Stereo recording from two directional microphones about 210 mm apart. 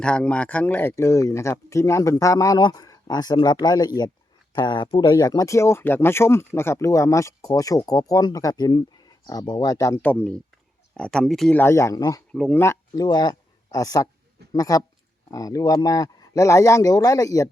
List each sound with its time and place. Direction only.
0.0 s speech: 5° left (ahead or behind)
12.3 s speech: 5° left (ahead or behind)